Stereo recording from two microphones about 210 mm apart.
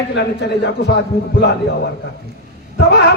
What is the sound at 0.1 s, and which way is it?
A man's voice, 55° left (ahead or behind).